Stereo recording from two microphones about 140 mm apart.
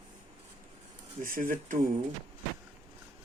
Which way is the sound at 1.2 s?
85° right.